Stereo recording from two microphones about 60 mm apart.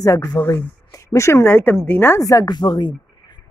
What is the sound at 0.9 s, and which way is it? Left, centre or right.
Speech, left.